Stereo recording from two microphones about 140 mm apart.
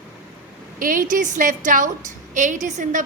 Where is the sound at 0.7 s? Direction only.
75° right (ahead or behind).